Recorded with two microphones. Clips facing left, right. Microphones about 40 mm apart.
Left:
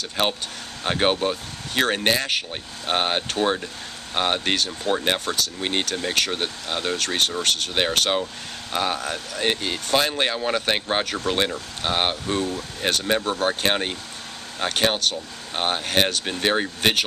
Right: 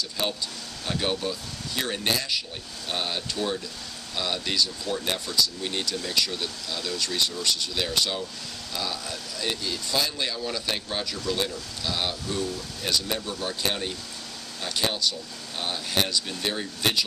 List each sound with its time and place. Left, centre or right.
0.2 s speech: left